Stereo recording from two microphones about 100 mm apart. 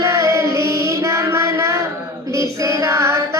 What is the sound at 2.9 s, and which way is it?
Carnatic music, 30° right (ahead or behind).